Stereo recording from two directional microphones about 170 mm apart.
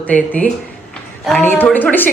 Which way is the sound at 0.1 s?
10° left (ahead or behind).